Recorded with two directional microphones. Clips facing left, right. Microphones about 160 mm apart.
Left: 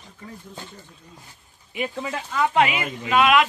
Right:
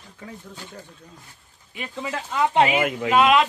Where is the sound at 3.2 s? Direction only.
30° right (ahead or behind).